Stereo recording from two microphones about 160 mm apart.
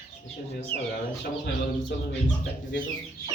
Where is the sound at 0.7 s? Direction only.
75° left (ahead or behind).